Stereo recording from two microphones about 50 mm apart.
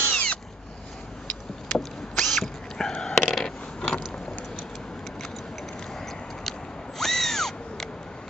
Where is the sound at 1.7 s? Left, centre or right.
Centre.